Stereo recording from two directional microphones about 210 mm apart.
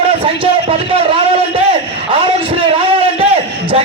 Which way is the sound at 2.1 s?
25° right (ahead or behind).